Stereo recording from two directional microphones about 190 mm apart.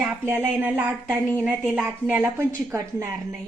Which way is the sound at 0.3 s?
10° right (ahead or behind).